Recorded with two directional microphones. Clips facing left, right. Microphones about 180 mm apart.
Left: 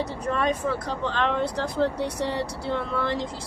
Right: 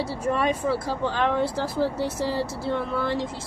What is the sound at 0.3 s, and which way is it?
Speech, 10° right (ahead or behind).